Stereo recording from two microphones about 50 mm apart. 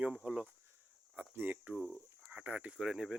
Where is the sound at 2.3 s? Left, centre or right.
Right.